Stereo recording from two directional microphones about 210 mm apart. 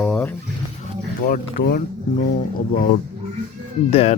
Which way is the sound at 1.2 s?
40° left (ahead or behind).